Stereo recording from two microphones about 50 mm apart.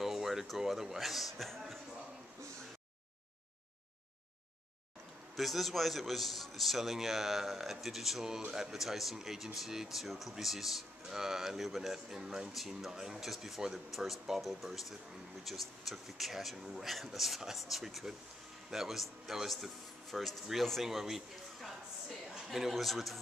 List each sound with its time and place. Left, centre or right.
0.0 s a man's voice: centre
5.3 s a man's voice: centre